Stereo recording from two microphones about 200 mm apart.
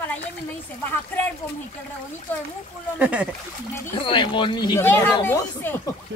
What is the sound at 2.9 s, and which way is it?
Speech, 5° right (ahead or behind).